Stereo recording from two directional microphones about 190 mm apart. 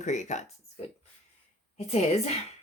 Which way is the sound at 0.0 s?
40° left (ahead or behind).